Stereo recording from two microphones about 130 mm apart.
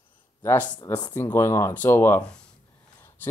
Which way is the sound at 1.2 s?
20° left (ahead or behind).